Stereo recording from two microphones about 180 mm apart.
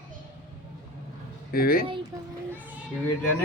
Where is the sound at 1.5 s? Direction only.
55° left (ahead or behind).